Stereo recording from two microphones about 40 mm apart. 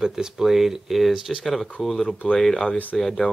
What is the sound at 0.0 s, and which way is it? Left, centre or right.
Speech, centre.